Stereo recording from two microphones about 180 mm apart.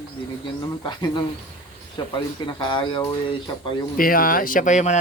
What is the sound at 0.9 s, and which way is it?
Speech, 25° left (ahead or behind).